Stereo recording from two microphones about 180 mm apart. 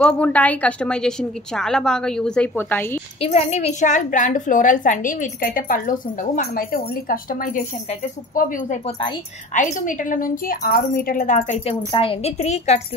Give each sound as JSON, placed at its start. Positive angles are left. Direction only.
{"t": 0.0, "sound": "a woman's voice", "side_deg": 5}
{"t": 3.2, "sound": "a woman's voice", "side_deg": 35}